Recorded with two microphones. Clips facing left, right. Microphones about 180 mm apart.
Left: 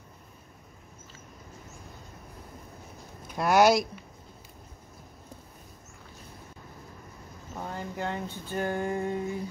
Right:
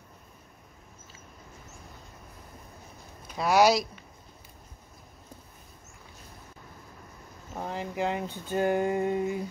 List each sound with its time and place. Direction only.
3.3 s speech: centre (ahead or behind)
7.5 s speech: 15° right (ahead or behind)